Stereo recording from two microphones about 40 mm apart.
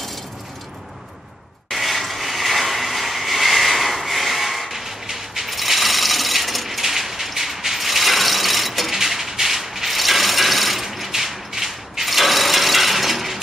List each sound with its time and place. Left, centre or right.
1.7 s mechanisms: centre